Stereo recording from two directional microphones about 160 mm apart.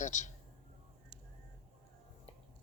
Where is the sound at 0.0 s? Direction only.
50° left (ahead or behind).